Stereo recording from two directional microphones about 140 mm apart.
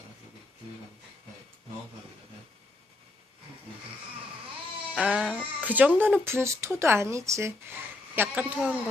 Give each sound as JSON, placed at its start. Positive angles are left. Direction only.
{"t": 4.9, "sound": "music", "side_deg": -5}
{"t": 6.2, "sound": "speech", "side_deg": -15}